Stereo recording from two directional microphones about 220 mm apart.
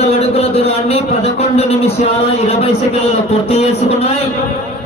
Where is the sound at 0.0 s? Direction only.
25° left (ahead or behind).